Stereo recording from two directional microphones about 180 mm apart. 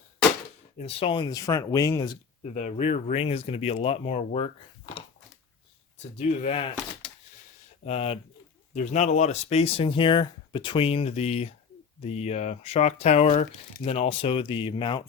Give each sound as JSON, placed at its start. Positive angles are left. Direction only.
{"t": 0.8, "sound": "speech", "side_deg": 35}
{"t": 2.4, "sound": "speech", "side_deg": 40}
{"t": 6.0, "sound": "speech", "side_deg": 40}
{"t": 7.9, "sound": "speech", "side_deg": 35}